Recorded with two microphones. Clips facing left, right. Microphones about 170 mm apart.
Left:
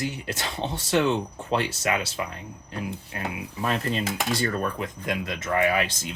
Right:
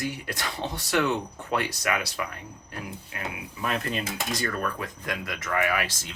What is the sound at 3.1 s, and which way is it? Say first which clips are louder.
Speech: left 2 dB; 35° left (ahead or behind).